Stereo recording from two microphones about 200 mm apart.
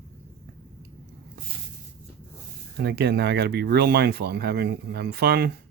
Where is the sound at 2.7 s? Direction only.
55° right (ahead or behind).